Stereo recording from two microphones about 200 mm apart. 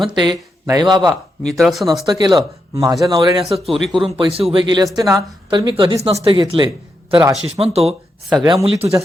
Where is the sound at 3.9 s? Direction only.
25° right (ahead or behind).